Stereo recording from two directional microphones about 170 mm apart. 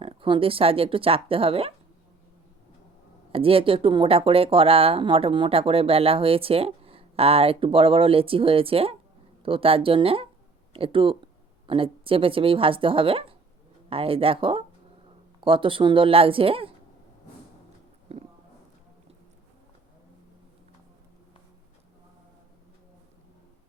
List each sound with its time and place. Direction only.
0.0 s speech: 30° right (ahead or behind)
3.3 s speech: 35° right (ahead or behind)
18.1 s a sound: 35° right (ahead or behind)